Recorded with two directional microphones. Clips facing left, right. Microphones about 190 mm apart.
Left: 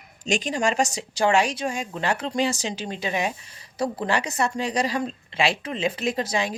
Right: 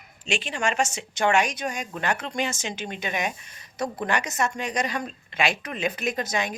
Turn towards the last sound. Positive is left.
turn(degrees=30)  # may be behind; listen again after turning